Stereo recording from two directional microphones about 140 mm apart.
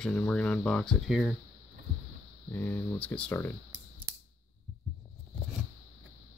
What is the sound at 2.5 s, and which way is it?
Speech, 15° left (ahead or behind).